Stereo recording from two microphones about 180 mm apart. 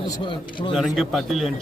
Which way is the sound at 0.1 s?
25° left (ahead or behind).